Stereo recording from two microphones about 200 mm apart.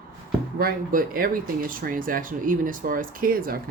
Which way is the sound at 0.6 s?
45° right (ahead or behind).